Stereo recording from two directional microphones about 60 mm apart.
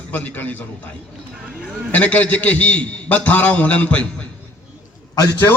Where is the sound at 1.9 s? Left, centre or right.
Left.